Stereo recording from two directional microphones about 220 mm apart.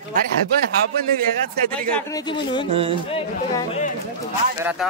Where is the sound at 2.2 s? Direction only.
20° left (ahead or behind).